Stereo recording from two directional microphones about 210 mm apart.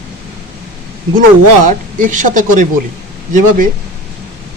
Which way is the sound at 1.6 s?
40° right (ahead or behind).